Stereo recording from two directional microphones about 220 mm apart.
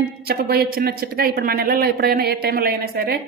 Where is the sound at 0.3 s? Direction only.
45° right (ahead or behind).